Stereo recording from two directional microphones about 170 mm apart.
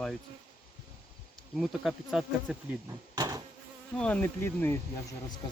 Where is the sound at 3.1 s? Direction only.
20° right (ahead or behind).